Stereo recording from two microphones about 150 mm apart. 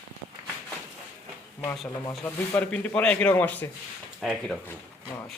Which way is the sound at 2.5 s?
10° left (ahead or behind).